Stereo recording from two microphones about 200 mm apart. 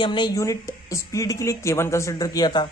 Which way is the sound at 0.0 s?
25° left (ahead or behind).